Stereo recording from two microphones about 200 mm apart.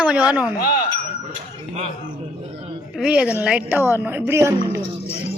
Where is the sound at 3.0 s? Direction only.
5° right (ahead or behind).